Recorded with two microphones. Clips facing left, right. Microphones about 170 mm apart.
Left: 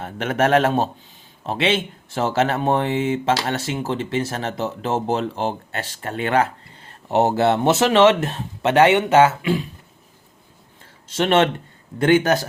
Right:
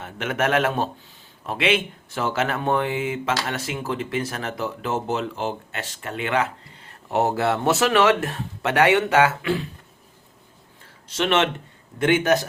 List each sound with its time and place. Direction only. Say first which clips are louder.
0.0 s a man's voice: left 4 dB; 35° left (ahead or behind)
7.1 s speech: left 4 dB; 25° left (ahead or behind)
11.1 s a man's voice: left 4 dB; 35° left (ahead or behind)